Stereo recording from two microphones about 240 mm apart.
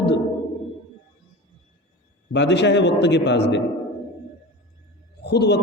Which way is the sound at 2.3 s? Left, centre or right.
Left.